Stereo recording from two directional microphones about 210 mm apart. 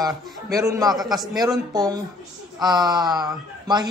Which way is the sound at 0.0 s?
15° right (ahead or behind).